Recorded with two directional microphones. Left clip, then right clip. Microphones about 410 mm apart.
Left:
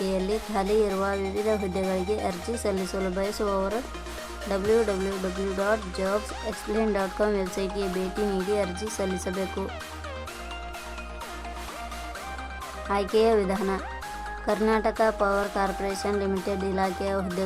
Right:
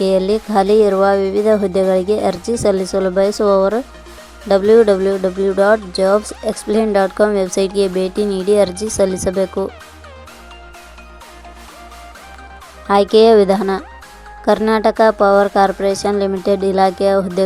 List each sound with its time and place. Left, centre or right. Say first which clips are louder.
0.0 s speech: right 13 dB; centre
9.6 s speech: right 12 dB; centre
12.9 s speech: right 13 dB; centre